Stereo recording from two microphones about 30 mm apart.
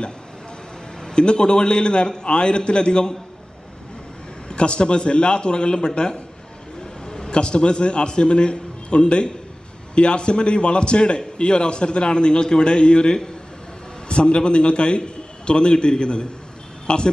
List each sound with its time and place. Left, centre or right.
1.0 s a man's voice: left
4.5 s a man's voice: left